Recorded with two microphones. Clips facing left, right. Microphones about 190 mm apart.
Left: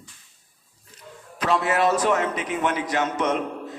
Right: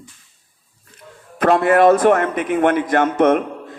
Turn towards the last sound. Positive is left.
turn(degrees=-55)  # may be behind; listen again after turning